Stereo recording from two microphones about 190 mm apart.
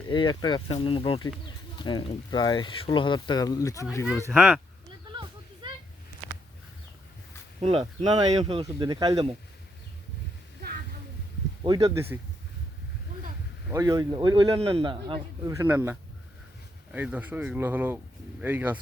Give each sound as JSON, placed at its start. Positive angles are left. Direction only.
{"t": 0.1, "sound": "speech", "side_deg": 25}
{"t": 4.3, "sound": "speech", "side_deg": -5}
{"t": 5.1, "sound": "a sound", "side_deg": -25}
{"t": 7.6, "sound": "a man's voice", "side_deg": -30}
{"t": 11.6, "sound": "speech", "side_deg": -20}
{"t": 13.7, "sound": "a man's voice", "side_deg": -20}